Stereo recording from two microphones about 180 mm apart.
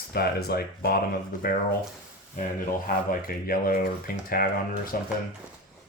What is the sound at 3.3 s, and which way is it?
Speech, 55° left (ahead or behind).